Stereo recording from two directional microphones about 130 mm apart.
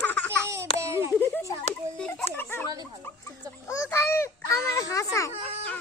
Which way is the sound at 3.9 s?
20° left (ahead or behind).